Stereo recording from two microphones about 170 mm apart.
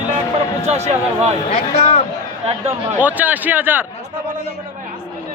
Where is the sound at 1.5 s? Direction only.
35° left (ahead or behind).